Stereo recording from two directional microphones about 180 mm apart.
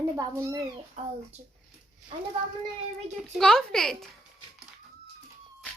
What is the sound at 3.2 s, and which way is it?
Speech, 5° left (ahead or behind).